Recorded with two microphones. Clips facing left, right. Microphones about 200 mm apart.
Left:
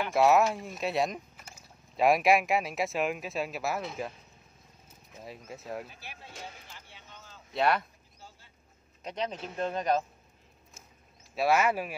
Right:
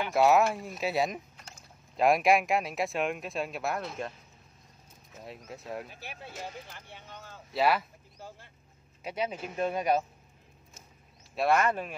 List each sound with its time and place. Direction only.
0.0 s speech: centre (ahead or behind)
5.2 s speech: centre (ahead or behind)
6.7 s a sound: 55° right (ahead or behind)
7.5 s speech: 5° right (ahead or behind)
8.2 s vehicle: 50° right (ahead or behind)
9.0 s speech: 10° right (ahead or behind)
11.3 s speech: 5° left (ahead or behind)